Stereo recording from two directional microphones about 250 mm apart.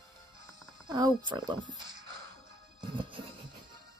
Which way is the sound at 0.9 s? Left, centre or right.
Centre.